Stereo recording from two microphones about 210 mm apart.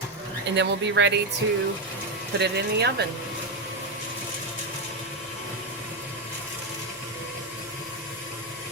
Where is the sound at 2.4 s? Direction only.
55° right (ahead or behind).